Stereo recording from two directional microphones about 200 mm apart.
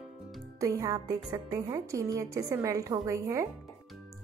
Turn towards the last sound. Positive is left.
turn(degrees=-15)  # may be behind; listen again after turning